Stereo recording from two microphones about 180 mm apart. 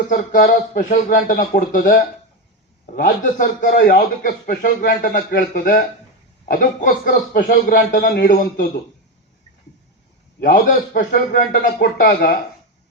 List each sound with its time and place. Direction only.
0.1 s a man's voice: 50° left (ahead or behind)
10.4 s a man's voice: 55° left (ahead or behind)